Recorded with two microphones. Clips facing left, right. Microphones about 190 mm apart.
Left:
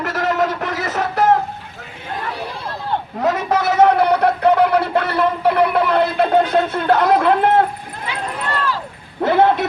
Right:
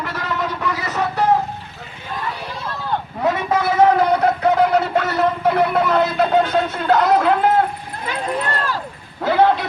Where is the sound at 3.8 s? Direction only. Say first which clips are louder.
Left 1 dB; 65° left (ahead or behind).